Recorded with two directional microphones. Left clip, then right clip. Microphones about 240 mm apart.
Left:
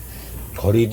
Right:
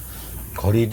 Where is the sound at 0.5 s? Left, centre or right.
Right.